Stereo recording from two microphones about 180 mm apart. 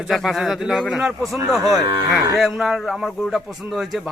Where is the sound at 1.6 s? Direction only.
20° right (ahead or behind).